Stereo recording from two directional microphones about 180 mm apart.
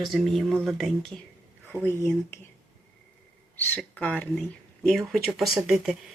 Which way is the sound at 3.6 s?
5° left (ahead or behind).